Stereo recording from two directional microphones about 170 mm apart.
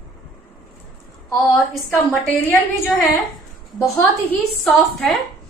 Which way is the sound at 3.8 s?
10° left (ahead or behind).